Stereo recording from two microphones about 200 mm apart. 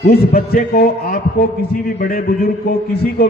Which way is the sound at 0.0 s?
45° left (ahead or behind).